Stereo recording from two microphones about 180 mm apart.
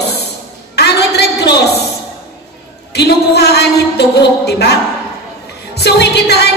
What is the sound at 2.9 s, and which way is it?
A woman's voice, 65° left (ahead or behind).